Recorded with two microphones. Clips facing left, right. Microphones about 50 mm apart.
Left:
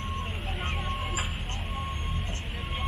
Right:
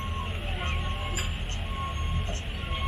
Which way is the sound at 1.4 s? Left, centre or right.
Centre.